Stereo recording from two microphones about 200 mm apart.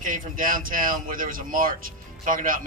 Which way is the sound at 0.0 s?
45° right (ahead or behind).